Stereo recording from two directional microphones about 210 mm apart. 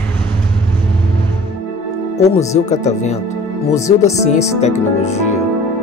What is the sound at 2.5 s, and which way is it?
Speech, 35° left (ahead or behind).